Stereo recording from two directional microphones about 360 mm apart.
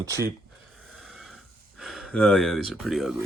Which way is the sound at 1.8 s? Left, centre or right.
Centre.